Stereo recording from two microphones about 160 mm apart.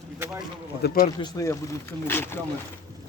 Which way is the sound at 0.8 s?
60° left (ahead or behind).